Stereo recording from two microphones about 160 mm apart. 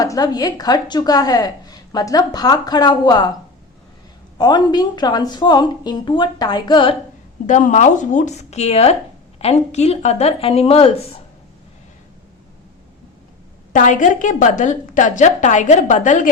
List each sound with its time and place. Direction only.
0.0 s speech: 25° left (ahead or behind)
4.4 s speech: 25° left (ahead or behind)
7.4 s a woman's voice: 50° left (ahead or behind)
13.7 s a woman's voice: 55° left (ahead or behind)